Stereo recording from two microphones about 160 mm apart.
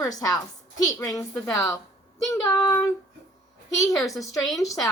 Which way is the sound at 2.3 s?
20° left (ahead or behind).